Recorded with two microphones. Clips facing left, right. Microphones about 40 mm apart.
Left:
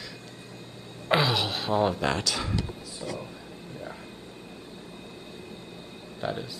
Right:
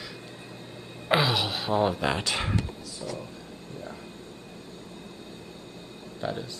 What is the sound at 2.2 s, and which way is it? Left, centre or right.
Speech, right.